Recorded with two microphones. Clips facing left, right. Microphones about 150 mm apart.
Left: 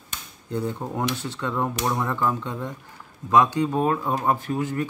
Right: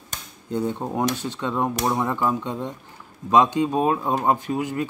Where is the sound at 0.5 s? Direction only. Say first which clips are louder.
Right 3 dB; 20° right (ahead or behind).